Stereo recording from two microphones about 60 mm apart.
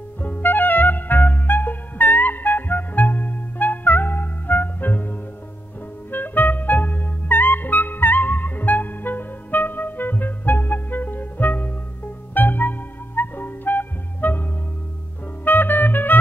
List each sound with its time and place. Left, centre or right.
0.2 s music: left
6.1 s clarinet: left
15.4 s music: left